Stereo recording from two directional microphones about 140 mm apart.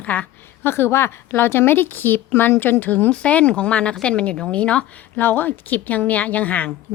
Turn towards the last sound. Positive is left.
turn(degrees=10)  # may be behind; listen again after turning